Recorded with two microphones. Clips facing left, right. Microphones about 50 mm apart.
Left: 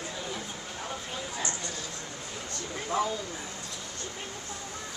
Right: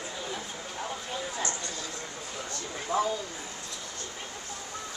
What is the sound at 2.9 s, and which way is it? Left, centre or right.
Speech, left.